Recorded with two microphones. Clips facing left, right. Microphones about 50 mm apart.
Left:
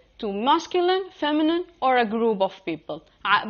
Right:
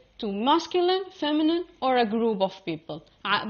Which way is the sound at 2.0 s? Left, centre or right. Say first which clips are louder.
Left 2 dB; left.